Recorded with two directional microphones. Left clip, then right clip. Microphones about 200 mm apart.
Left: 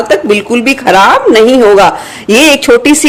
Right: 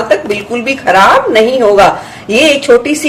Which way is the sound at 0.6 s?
55° left (ahead or behind).